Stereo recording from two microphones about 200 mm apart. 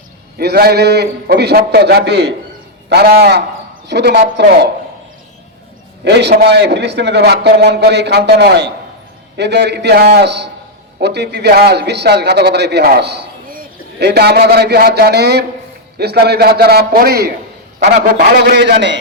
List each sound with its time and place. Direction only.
0.3 s a man's voice: 50° right (ahead or behind)
6.1 s a man's voice: 55° right (ahead or behind)